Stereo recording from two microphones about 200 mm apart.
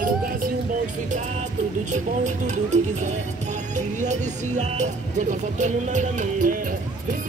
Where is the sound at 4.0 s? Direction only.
35° right (ahead or behind).